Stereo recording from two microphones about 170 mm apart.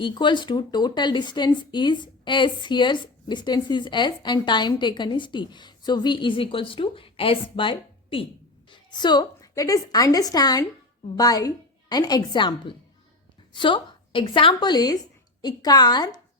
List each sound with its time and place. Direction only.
0.0 s a woman's voice: 25° left (ahead or behind)